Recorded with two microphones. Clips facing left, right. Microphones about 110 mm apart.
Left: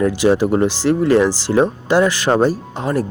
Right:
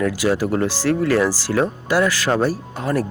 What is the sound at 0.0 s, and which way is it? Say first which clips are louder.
Speech: left 5 dB; 25° left (ahead or behind).